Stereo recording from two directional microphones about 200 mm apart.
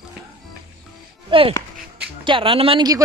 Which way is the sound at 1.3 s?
25° right (ahead or behind).